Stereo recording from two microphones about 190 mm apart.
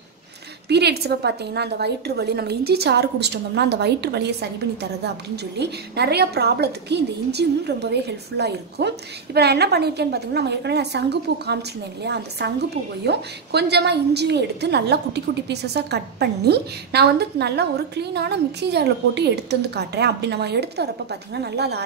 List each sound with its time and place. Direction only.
0.7 s a woman's voice: 60° right (ahead or behind)